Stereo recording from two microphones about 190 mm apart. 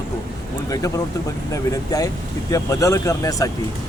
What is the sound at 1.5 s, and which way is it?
A man's voice, 20° left (ahead or behind).